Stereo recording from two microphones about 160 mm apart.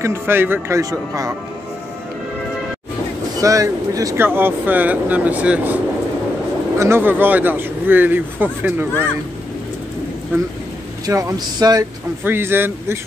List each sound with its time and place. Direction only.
0.0 s speech: 15° right (ahead or behind)
3.3 s speech: 20° right (ahead or behind)
6.8 s speech: 15° right (ahead or behind)
10.3 s speech: 15° right (ahead or behind)